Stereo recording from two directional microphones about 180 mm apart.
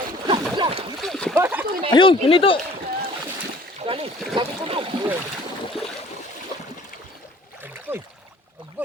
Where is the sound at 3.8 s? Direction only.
35° right (ahead or behind).